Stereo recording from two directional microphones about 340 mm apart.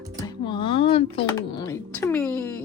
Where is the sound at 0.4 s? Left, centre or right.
Centre.